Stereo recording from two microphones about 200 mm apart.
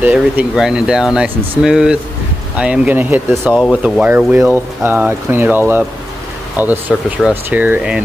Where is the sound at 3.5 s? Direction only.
Centre (ahead or behind).